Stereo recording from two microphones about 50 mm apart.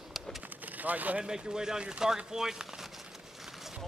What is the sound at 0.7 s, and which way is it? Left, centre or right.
Speech, right.